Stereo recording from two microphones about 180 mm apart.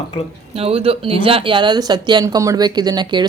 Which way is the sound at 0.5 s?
30° right (ahead or behind).